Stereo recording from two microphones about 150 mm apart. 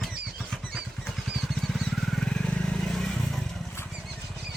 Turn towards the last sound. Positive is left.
turn(degrees=-5)  # may be behind; listen again after turning